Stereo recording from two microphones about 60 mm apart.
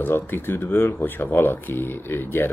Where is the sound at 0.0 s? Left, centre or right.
Left.